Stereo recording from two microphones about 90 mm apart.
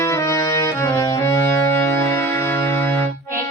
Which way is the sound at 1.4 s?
30° left (ahead or behind).